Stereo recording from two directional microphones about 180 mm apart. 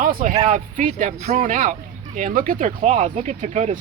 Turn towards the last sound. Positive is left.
turn(degrees=-40)  # may be behind; listen again after turning